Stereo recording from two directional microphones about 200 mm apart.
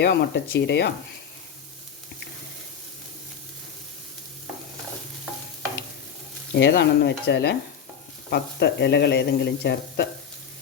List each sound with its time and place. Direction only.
0.0 s speech: 55° left (ahead or behind)
6.5 s speech: 55° left (ahead or behind)